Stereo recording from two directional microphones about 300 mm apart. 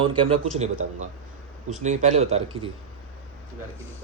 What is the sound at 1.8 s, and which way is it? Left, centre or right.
Speech, right.